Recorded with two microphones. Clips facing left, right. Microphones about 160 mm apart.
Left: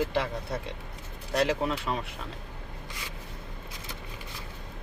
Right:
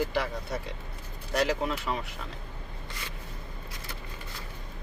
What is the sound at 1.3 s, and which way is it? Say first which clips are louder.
Speech: left 1 dB; 25° left (ahead or behind).